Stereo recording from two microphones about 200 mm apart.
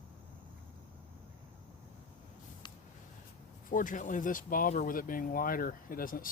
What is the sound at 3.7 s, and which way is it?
Speech, 40° left (ahead or behind).